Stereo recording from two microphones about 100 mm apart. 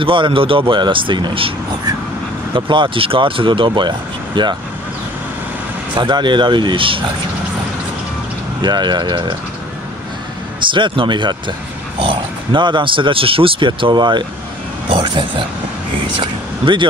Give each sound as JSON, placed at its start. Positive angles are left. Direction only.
{"t": 0.0, "sound": "speech", "side_deg": -60}
{"t": 2.5, "sound": "speech", "side_deg": -55}
{"t": 5.9, "sound": "speech", "side_deg": -50}
{"t": 8.6, "sound": "speech", "side_deg": -45}
{"t": 10.6, "sound": "speech", "side_deg": -55}
{"t": 14.9, "sound": "speech", "side_deg": -60}